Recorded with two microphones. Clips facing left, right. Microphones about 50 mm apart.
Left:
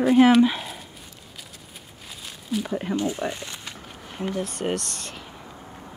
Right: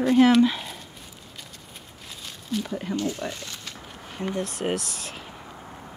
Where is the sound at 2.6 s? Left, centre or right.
Left.